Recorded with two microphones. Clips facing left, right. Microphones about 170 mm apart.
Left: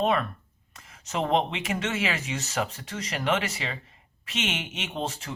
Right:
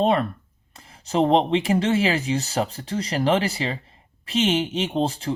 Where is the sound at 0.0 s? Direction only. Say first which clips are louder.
Right 5 dB; 30° right (ahead or behind).